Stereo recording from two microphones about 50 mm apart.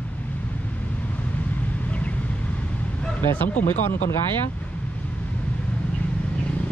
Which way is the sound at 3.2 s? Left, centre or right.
Left.